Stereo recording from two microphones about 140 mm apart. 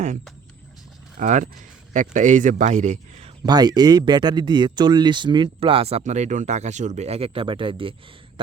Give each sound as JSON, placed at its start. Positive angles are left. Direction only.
{"t": 1.2, "sound": "a man's voice", "side_deg": -60}
{"t": 3.4, "sound": "speech", "side_deg": -30}